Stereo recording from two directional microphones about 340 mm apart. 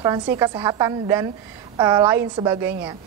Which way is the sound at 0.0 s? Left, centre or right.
Centre.